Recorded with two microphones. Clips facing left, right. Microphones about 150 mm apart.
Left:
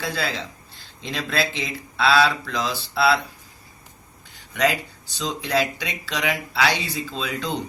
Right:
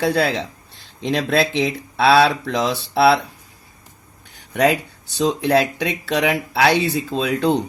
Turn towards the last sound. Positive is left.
turn(degrees=-55)  # may be behind; listen again after turning